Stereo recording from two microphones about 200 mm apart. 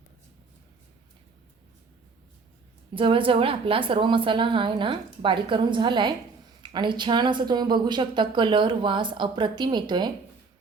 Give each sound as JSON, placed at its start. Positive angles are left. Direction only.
{"t": 2.9, "sound": "speech", "side_deg": -25}